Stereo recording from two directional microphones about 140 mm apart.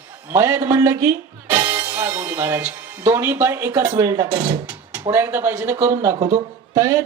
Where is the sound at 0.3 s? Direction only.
20° right (ahead or behind).